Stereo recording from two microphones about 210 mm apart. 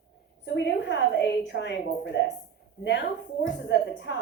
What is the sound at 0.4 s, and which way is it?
A woman's voice, 55° left (ahead or behind).